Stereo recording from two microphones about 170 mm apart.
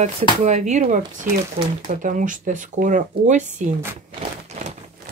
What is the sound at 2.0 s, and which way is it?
Speech, 50° right (ahead or behind).